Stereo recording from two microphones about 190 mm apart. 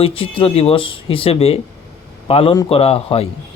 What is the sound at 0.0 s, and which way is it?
A man's voice, 30° left (ahead or behind).